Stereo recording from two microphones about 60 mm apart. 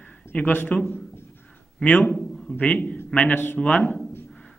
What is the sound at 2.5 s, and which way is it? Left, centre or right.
A man's voice, left.